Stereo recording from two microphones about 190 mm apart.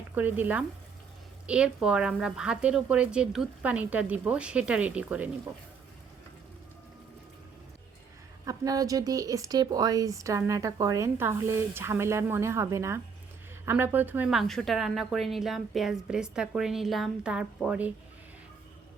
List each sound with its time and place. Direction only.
0.1 s a woman's voice: 10° right (ahead or behind)
8.4 s a woman's voice: 20° right (ahead or behind)